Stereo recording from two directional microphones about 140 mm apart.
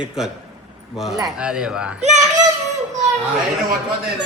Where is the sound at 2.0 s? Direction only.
55° right (ahead or behind).